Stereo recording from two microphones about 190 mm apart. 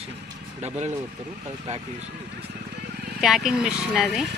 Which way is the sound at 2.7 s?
60° right (ahead or behind).